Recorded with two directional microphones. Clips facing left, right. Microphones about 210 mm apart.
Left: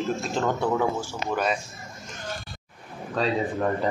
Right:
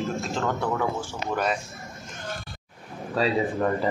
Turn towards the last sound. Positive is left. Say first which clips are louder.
# right 1 dB
turn(degrees=-5)  # may be behind; listen again after turning